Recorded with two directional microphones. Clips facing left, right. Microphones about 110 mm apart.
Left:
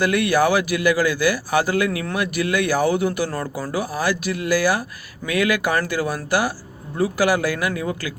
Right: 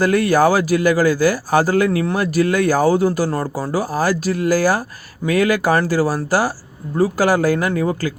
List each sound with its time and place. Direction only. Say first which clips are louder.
0.0 s a man's voice: right 4 dB; 40° right (ahead or behind)